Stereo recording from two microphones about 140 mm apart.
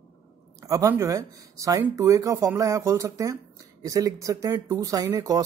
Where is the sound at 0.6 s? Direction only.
25° right (ahead or behind).